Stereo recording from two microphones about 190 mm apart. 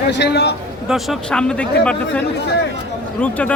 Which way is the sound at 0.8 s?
Centre (ahead or behind).